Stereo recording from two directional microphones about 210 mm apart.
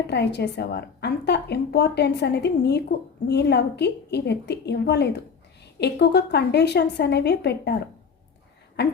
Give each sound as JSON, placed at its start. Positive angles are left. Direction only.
{"t": 0.1, "sound": "a woman's voice", "side_deg": 55}